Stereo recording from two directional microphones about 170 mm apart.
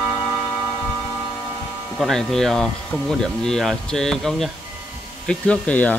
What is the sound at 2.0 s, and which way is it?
Speech, centre (ahead or behind).